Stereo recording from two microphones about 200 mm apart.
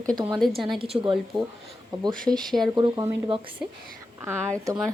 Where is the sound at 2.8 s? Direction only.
20° right (ahead or behind).